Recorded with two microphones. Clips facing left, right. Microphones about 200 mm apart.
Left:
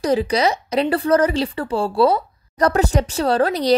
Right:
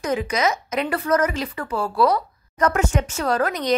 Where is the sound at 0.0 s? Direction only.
35° left (ahead or behind).